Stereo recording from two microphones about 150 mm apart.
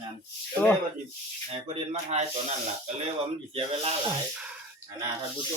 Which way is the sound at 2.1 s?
50° right (ahead or behind).